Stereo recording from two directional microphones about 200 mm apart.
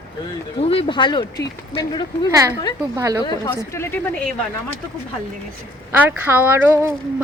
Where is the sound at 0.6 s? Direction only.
30° left (ahead or behind).